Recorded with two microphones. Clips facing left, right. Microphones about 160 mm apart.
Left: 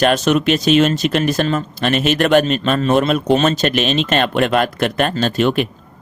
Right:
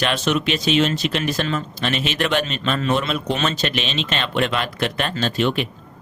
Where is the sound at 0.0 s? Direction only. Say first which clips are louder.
Left 7 dB; 45° left (ahead or behind).